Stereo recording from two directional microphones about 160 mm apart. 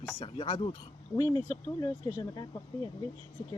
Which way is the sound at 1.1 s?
20° left (ahead or behind).